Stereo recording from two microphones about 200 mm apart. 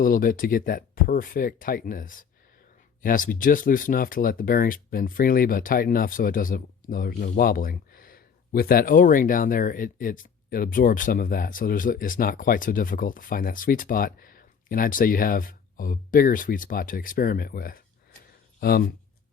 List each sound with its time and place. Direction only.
0.0 s speech: 45° left (ahead or behind)